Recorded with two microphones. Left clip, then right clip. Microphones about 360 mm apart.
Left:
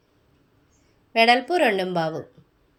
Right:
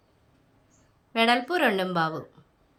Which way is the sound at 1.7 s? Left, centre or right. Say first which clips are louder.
Left 2 dB; centre.